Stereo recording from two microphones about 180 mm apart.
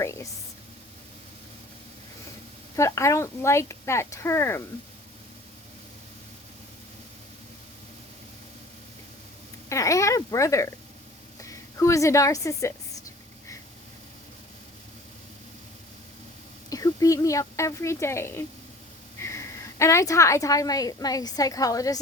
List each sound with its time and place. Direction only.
0.0 s a sound: 15° left (ahead or behind)
2.7 s speech: 15° left (ahead or behind)
9.6 s a woman's voice: 15° left (ahead or behind)
16.6 s a woman's voice: 20° left (ahead or behind)